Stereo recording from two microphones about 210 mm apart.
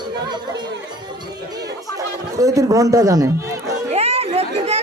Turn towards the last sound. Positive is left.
turn(degrees=-30)  # may be behind; listen again after turning